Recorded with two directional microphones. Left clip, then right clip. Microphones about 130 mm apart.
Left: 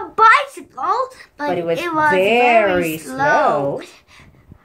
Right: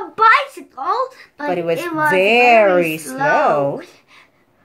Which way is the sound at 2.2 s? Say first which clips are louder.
Right 4 dB; 20° right (ahead or behind).